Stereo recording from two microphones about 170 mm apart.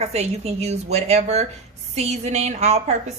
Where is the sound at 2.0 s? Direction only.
40° right (ahead or behind).